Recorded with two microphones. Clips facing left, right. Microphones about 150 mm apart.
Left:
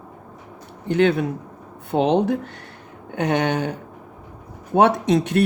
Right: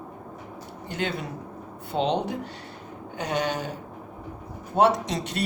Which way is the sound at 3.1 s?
65° left (ahead or behind).